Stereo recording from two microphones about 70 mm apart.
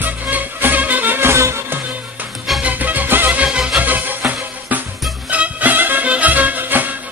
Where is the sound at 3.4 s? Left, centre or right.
Centre.